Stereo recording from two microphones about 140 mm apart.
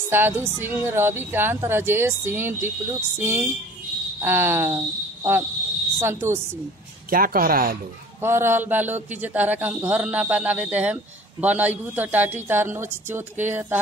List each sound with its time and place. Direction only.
0.1 s a woman's voice: 15° right (ahead or behind)
7.1 s speech: 90° right
8.2 s a woman's voice: 15° right (ahead or behind)